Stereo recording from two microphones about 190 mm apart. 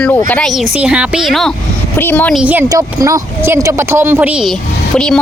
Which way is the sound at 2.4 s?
10° right (ahead or behind).